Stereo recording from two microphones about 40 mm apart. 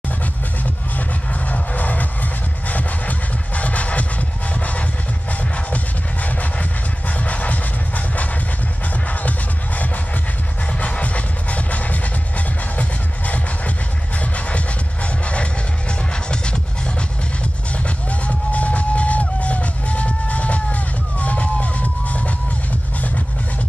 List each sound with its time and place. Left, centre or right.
1.5 s music: left
6.2 s music: left
10.8 s music: left
17.8 s music: left